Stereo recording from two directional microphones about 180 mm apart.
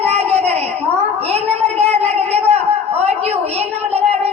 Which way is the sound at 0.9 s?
35° right (ahead or behind).